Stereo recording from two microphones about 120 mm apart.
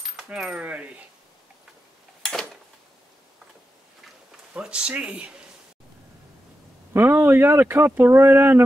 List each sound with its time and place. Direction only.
0.0 s speech: 10° right (ahead or behind)
2.2 s a sound: 5° left (ahead or behind)
4.6 s speech: 10° right (ahead or behind)
6.9 s speech: 20° right (ahead or behind)